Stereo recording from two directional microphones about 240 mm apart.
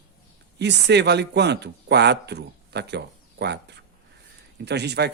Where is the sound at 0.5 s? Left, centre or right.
Right.